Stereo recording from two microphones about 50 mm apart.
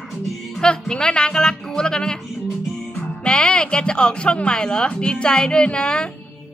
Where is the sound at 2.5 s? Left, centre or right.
Centre.